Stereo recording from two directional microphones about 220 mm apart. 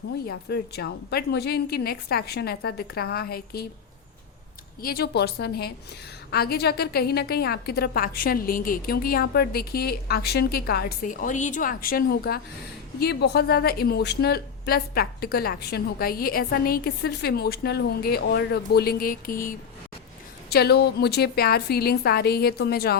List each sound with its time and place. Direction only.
0.3 s a woman's voice: 45° left (ahead or behind)
4.8 s a woman's voice: 45° left (ahead or behind)